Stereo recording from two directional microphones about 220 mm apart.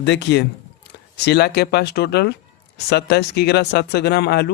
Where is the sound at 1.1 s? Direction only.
50° left (ahead or behind).